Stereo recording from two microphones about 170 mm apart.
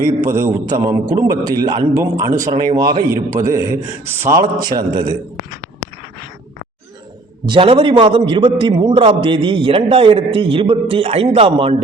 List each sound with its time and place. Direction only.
0.2 s a man's voice: 15° right (ahead or behind)
7.4 s a man's voice: 30° right (ahead or behind)